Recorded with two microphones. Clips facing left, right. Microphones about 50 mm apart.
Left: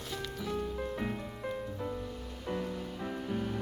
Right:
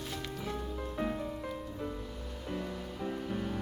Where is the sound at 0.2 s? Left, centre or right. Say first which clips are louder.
Left 1 dB; right.